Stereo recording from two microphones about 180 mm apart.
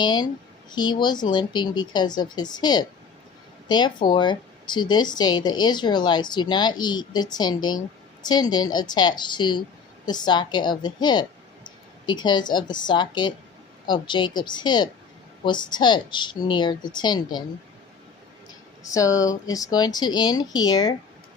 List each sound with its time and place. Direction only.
0.0 s a woman's voice: 25° left (ahead or behind)
18.4 s speech: 20° left (ahead or behind)